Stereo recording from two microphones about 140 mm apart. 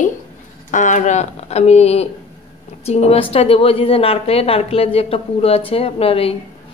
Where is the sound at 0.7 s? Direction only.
65° left (ahead or behind).